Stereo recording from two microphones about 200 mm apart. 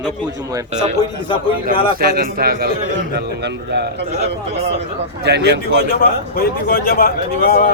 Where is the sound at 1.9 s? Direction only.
50° right (ahead or behind).